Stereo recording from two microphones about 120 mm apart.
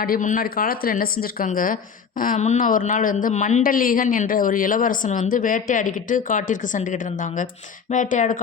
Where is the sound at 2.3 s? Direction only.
80° left.